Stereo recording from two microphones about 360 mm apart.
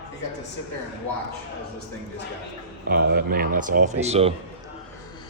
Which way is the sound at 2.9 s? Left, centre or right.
Right.